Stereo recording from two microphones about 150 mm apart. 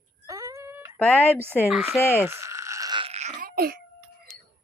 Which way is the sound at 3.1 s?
50° right (ahead or behind).